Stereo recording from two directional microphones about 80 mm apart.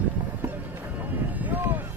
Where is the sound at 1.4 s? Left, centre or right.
Right.